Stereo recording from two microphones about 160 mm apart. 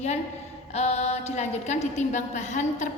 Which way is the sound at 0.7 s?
40° left (ahead or behind).